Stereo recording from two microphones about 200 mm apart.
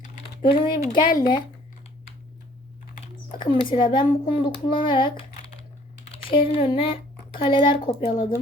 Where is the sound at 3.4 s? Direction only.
25° left (ahead or behind).